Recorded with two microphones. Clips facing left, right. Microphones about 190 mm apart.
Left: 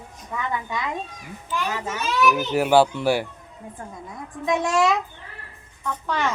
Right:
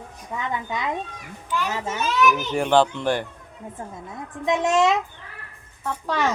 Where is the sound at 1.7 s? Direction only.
25° right (ahead or behind).